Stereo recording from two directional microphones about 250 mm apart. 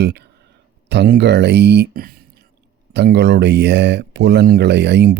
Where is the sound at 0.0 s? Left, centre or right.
Right.